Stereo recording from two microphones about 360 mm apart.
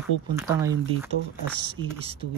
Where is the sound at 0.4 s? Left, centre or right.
Centre.